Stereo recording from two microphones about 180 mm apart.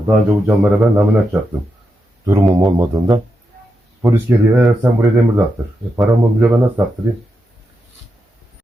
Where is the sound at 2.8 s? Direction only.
20° right (ahead or behind).